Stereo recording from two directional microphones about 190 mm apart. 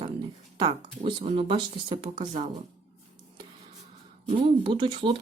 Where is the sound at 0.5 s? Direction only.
25° right (ahead or behind).